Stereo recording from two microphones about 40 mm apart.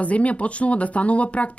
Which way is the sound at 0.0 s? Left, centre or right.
Left.